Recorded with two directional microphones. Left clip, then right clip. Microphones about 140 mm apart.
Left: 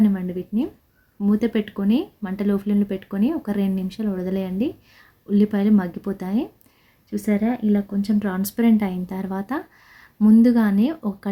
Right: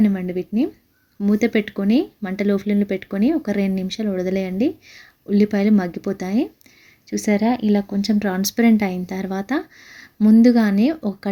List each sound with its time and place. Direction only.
0.0 s speech: 30° right (ahead or behind)
7.4 s speech: 70° right (ahead or behind)
8.2 s speech: 30° right (ahead or behind)